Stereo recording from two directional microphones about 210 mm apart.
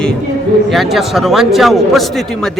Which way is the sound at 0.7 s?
Centre (ahead or behind).